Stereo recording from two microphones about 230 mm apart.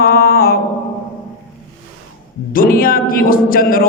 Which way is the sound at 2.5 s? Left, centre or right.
Left.